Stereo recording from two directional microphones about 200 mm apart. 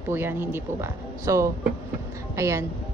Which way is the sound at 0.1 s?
10° right (ahead or behind).